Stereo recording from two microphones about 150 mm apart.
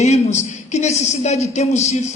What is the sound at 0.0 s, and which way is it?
A man's voice, 50° left (ahead or behind).